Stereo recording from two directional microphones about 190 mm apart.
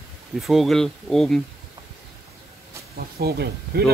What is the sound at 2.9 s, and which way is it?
Speech, 55° right (ahead or behind).